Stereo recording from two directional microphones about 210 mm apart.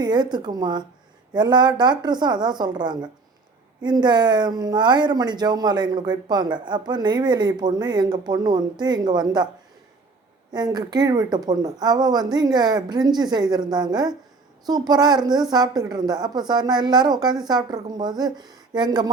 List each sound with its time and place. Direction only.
0.0 s speech: 20° right (ahead or behind)
10.5 s speech: 20° right (ahead or behind)